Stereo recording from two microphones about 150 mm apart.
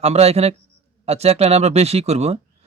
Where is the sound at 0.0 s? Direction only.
45° right (ahead or behind).